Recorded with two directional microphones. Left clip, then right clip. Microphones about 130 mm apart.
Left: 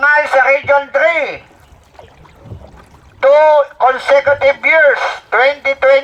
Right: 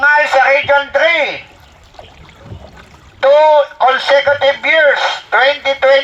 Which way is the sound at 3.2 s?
90° left.